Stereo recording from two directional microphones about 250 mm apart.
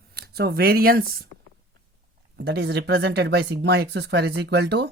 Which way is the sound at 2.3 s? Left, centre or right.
Right.